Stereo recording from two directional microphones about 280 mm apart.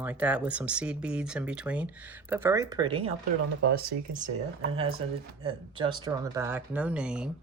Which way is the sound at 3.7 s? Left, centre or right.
Right.